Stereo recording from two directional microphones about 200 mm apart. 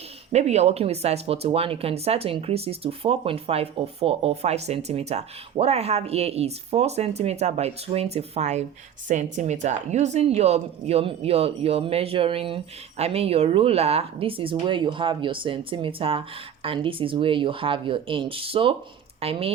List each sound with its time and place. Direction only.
0.3 s speech: 35° right (ahead or behind)